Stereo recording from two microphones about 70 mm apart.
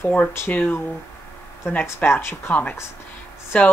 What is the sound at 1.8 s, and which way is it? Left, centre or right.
Speech, left.